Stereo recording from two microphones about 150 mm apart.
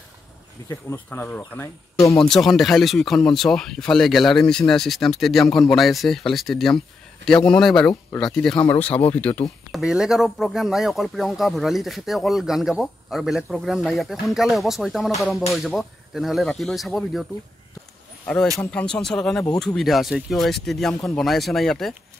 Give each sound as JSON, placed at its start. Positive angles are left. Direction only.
{"t": 0.7, "sound": "speech", "side_deg": 15}
{"t": 9.7, "sound": "speech", "side_deg": -5}